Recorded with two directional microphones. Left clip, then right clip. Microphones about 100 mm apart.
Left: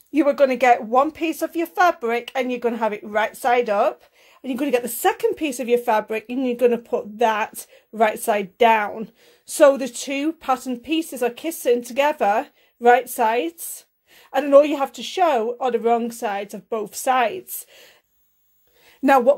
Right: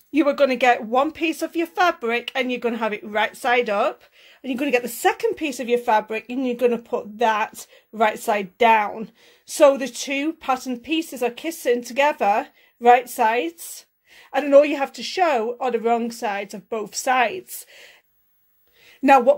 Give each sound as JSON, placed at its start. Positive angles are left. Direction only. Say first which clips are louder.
{"t": 0.1, "sound": "speech", "louder": "left 1 dB", "side_deg": 20}
{"t": 4.4, "sound": "speech", "louder": "even", "side_deg": 30}
{"t": 19.0, "sound": "speech", "louder": "right 1 dB", "side_deg": 30}